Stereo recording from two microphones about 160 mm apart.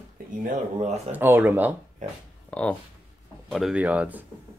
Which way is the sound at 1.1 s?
10° right (ahead or behind).